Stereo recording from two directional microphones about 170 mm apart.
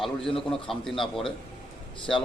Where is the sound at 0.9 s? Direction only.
30° left (ahead or behind).